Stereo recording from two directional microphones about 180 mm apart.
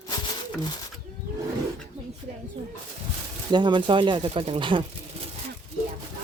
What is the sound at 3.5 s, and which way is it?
Speech, 25° right (ahead or behind).